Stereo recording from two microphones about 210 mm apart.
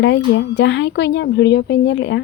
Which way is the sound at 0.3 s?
55° left (ahead or behind).